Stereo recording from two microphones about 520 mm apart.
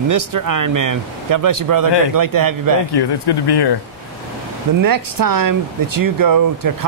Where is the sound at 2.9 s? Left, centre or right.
Left.